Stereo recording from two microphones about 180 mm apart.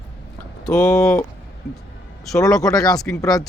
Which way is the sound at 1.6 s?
60° left (ahead or behind).